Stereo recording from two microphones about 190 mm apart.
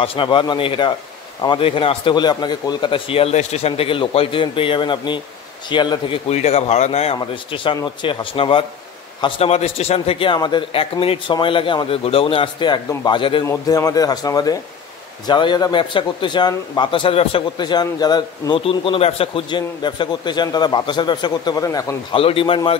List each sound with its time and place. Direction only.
0.0 s a man's voice: 25° left (ahead or behind)
22.2 s a man's voice: 30° left (ahead or behind)